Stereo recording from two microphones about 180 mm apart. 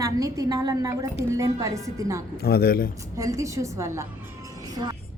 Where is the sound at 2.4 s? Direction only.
60° left (ahead or behind).